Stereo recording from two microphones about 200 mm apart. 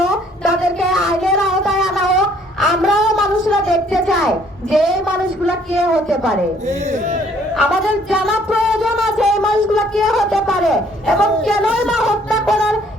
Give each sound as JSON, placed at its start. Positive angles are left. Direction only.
{"t": 0.0, "sound": "a sound", "side_deg": 0}
{"t": 4.7, "sound": "a woman's voice", "side_deg": 0}
{"t": 6.7, "sound": "speech", "side_deg": -35}
{"t": 7.5, "sound": "speech", "side_deg": -5}